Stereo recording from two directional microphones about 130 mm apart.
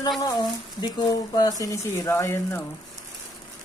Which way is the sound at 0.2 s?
30° left (ahead or behind).